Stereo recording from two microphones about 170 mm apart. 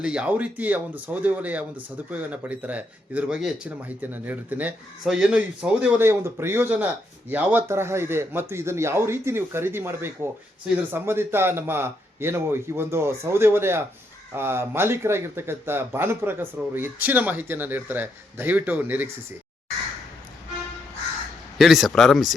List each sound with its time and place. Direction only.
0.0 s speech: 5° right (ahead or behind)
21.6 s speech: centre (ahead or behind)